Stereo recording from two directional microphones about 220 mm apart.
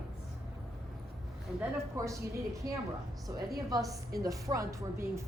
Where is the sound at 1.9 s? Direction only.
15° right (ahead or behind).